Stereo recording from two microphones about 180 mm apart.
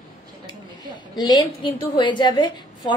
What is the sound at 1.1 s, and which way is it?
A woman's voice, 25° left (ahead or behind).